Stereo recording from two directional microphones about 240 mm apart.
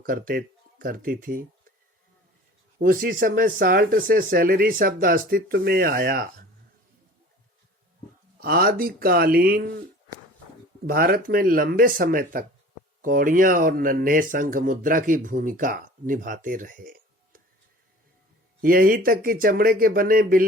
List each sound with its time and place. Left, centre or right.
0.0 s speech: right
2.7 s speech: right
8.4 s speech: right
10.8 s speech: right
18.6 s speech: right